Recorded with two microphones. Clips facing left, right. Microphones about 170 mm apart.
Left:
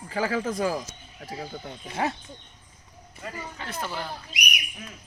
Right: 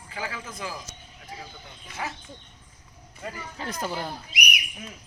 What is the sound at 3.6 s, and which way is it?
Speech, 35° right (ahead or behind).